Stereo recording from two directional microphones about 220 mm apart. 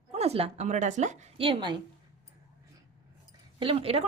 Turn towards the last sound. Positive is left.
turn(degrees=-25)  # may be behind; listen again after turning